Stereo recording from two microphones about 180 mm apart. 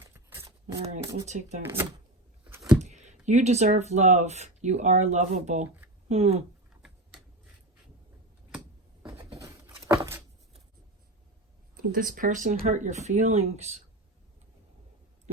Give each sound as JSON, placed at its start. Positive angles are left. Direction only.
{"t": 0.0, "sound": "a sound", "side_deg": -15}
{"t": 1.3, "sound": "speech", "side_deg": -40}
{"t": 1.6, "sound": "speech", "side_deg": -10}
{"t": 2.8, "sound": "speech", "side_deg": -40}
{"t": 9.3, "sound": "a sound", "side_deg": -20}
{"t": 11.8, "sound": "speech", "side_deg": -50}